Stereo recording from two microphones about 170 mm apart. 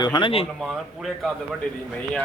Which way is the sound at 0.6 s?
Centre (ahead or behind).